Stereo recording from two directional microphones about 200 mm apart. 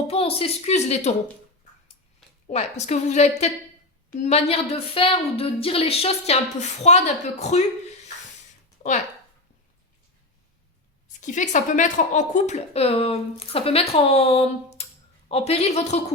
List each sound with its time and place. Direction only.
0.1 s a woman's voice: 30° left (ahead or behind)
2.5 s a woman's voice: 35° left (ahead or behind)
8.8 s a sound: 40° left (ahead or behind)
11.2 s a woman's voice: 40° left (ahead or behind)